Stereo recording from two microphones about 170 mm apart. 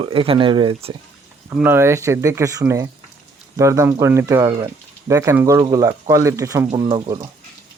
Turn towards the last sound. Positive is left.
turn(degrees=-25)  # may be behind; listen again after turning